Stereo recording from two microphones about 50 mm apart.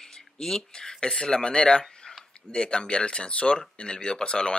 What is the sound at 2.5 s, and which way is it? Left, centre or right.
Speech, centre.